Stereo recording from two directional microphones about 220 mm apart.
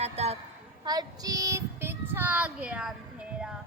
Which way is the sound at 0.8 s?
20° right (ahead or behind).